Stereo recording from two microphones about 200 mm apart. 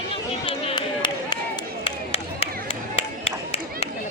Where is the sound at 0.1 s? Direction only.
30° left (ahead or behind).